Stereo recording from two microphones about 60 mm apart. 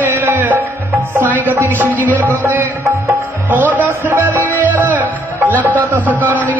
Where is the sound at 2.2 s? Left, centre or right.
Right.